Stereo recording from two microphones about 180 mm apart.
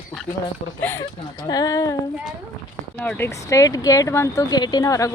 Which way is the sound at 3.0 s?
10° left (ahead or behind).